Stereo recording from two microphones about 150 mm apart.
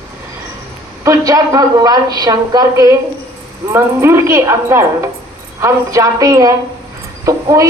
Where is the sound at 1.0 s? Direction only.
20° right (ahead or behind).